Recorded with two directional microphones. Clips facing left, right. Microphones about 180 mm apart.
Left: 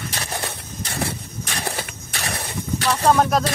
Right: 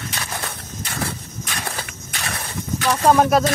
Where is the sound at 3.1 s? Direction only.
5° right (ahead or behind).